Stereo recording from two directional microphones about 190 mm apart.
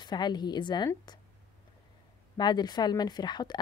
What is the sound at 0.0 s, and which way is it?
A woman's voice, 20° left (ahead or behind).